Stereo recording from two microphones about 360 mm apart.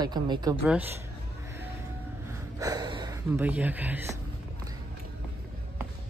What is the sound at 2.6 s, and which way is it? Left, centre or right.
Speech, centre.